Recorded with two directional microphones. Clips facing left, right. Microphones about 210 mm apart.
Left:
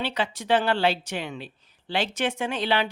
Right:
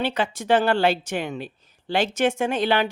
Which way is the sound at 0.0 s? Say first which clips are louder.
Right 4 dB; 45° right (ahead or behind).